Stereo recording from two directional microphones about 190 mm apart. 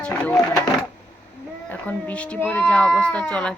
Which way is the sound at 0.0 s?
10° left (ahead or behind).